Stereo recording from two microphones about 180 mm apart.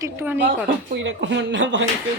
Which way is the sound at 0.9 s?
85° right.